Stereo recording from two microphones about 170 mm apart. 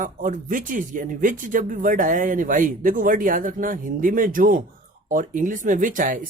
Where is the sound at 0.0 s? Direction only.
50° right (ahead or behind).